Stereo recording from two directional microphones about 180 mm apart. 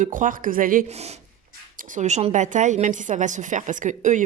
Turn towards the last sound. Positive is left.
turn(degrees=-45)  # may be behind; listen again after turning